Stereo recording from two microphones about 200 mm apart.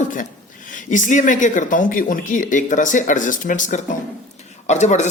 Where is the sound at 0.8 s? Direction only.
40° left (ahead or behind).